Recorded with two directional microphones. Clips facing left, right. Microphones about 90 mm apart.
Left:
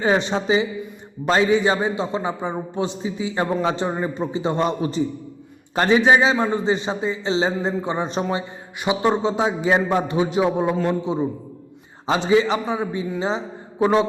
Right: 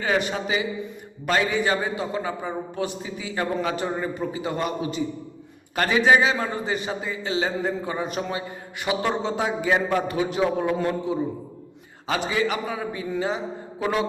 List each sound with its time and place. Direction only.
0.0 s a man's voice: 25° left (ahead or behind)
5.7 s a man's voice: 25° left (ahead or behind)